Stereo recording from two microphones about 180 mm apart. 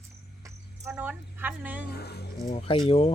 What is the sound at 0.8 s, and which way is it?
Speech, 10° right (ahead or behind).